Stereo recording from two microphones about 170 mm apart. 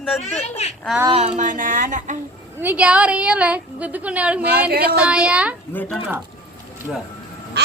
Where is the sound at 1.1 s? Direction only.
40° right (ahead or behind).